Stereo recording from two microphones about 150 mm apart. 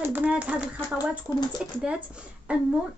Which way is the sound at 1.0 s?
25° left (ahead or behind).